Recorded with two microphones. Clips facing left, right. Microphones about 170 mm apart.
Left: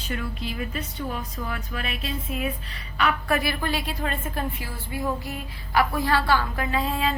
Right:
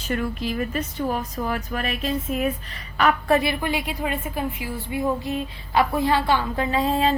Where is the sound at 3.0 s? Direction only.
30° right (ahead or behind).